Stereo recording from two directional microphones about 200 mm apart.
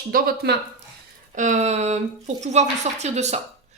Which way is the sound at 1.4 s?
35° right (ahead or behind).